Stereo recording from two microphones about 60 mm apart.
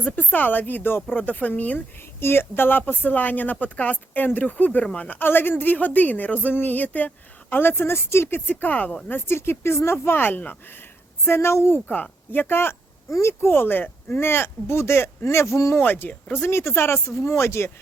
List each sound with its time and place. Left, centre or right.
0.0 s speech: left
2.2 s speech: left
11.3 s speech: left
11.9 s speech: left
13.1 s speech: left
15.8 s speech: left